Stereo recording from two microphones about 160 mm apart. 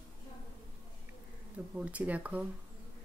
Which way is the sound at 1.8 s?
10° right (ahead or behind).